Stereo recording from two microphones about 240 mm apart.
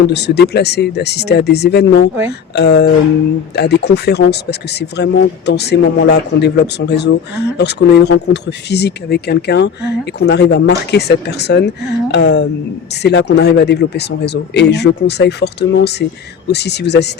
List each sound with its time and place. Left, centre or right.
0.1 s speech: left